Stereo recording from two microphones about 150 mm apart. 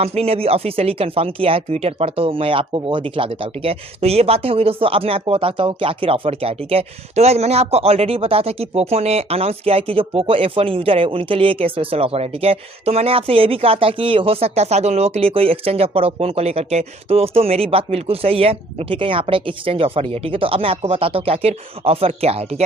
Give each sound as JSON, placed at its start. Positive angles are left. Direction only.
{"t": 0.0, "sound": "speech", "side_deg": -45}